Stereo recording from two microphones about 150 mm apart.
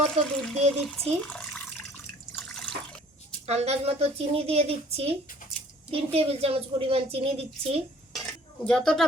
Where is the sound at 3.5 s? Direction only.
45° right (ahead or behind).